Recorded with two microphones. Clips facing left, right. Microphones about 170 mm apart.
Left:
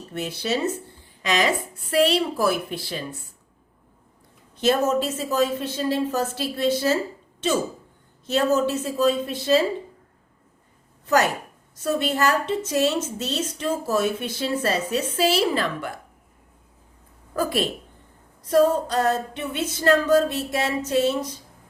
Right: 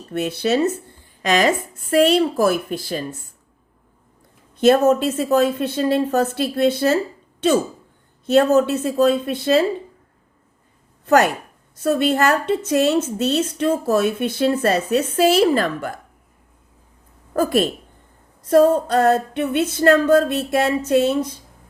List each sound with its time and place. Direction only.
0.1 s a woman's voice: 55° right (ahead or behind)
4.5 s a woman's voice: 55° right (ahead or behind)
8.3 s a woman's voice: 60° right (ahead or behind)
11.0 s a woman's voice: 55° right (ahead or behind)
17.3 s a woman's voice: 50° right (ahead or behind)